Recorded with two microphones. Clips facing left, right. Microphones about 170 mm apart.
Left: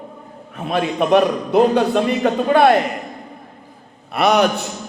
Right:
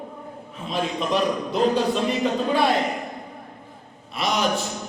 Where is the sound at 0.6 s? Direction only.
60° left (ahead or behind).